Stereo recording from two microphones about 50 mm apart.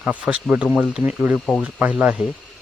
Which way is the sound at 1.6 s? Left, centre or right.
Right.